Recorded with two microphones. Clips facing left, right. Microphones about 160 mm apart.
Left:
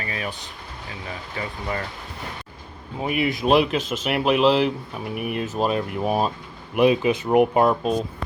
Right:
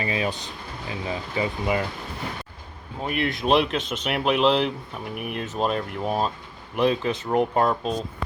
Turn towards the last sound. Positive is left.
turn(degrees=10)  # may be behind; listen again after turning